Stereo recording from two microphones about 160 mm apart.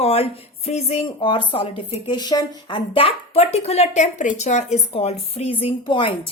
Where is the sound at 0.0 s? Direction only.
40° left (ahead or behind).